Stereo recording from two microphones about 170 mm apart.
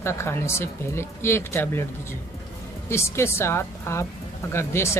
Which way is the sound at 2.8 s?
15° left (ahead or behind).